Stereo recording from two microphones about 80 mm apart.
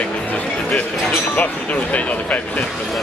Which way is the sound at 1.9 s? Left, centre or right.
Centre.